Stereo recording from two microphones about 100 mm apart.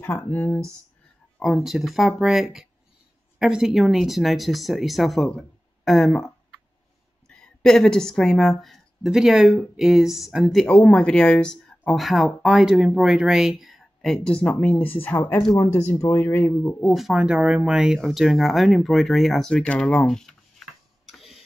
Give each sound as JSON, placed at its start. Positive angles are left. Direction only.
{"t": 0.0, "sound": "speech", "side_deg": 20}
{"t": 1.4, "sound": "a woman's voice", "side_deg": 0}
{"t": 15.5, "sound": "speech", "side_deg": 35}
{"t": 16.0, "sound": "speech", "side_deg": 25}
{"t": 16.8, "sound": "speech", "side_deg": 0}